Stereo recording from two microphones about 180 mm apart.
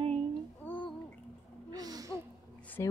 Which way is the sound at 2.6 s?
10° left (ahead or behind).